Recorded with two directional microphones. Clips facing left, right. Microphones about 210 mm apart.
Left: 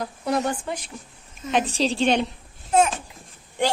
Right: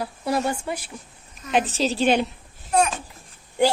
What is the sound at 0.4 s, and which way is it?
A woman's voice, 10° right (ahead or behind).